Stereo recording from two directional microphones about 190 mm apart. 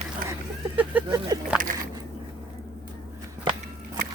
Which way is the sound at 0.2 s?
50° right (ahead or behind).